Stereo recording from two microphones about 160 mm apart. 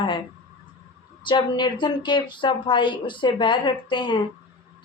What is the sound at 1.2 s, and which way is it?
A woman's voice, 30° left (ahead or behind).